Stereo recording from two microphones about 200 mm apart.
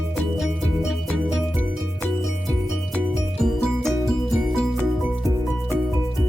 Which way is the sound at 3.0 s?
Centre (ahead or behind).